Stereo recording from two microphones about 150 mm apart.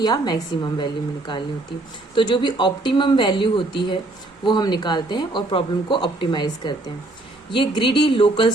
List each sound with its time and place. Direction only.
0.0 s a woman's voice: 30° left (ahead or behind)
2.1 s speech: 30° left (ahead or behind)